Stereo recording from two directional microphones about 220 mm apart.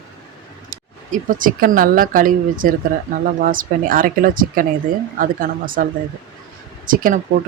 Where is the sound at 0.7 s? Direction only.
40° right (ahead or behind).